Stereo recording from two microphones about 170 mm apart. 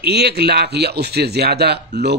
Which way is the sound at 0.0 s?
75° right (ahead or behind).